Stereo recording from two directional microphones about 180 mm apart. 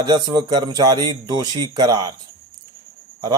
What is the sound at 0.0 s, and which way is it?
A man's voice, 20° right (ahead or behind).